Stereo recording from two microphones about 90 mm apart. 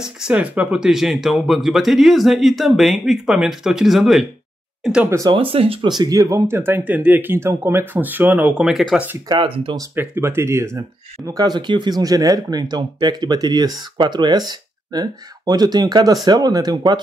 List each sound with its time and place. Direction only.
0.0 s speech: 10° right (ahead or behind)
5.3 s speech: 85° right
5.9 s speech: 50° right (ahead or behind); by 9.2 s 20° right (ahead or behind)
9.3 s speech: 80° right
9.9 s speech: 25° right (ahead or behind)
11.2 s speech: 45° right (ahead or behind)